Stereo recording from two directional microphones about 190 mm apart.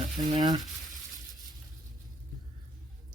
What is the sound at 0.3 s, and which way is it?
Frying, 20° right (ahead or behind).